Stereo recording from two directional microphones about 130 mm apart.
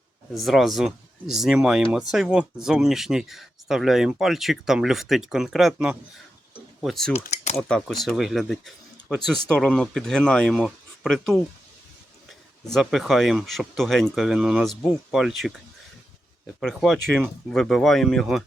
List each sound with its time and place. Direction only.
0.3 s speech: centre (ahead or behind)
7.1 s speech: 60° left (ahead or behind)
7.5 s speech: 5° left (ahead or behind)
12.6 s speech: centre (ahead or behind)
16.6 s speech: centre (ahead or behind)